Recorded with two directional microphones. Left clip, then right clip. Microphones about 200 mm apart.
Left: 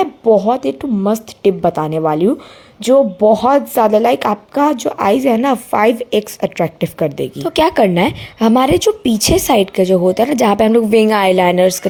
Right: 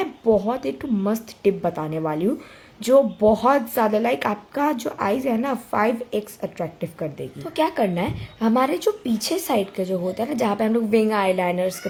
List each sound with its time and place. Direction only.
0.0 s speech: 25° left (ahead or behind); by 11.9 s 40° left (ahead or behind)